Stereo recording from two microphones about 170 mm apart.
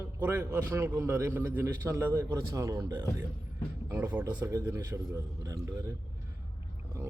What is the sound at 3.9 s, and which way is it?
A man's voice, 10° right (ahead or behind).